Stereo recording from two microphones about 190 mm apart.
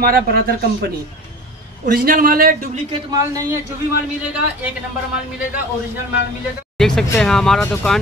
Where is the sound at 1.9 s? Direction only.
50° right (ahead or behind).